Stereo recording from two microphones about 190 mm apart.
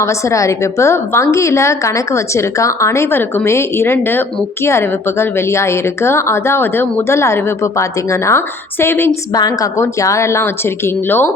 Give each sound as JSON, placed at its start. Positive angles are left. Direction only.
{"t": 0.0, "sound": "a woman's voice", "side_deg": 15}